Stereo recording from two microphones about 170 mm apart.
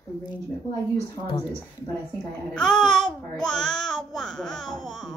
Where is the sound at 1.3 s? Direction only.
25° left (ahead or behind).